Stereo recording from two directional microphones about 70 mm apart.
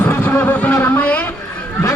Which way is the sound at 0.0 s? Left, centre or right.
Left.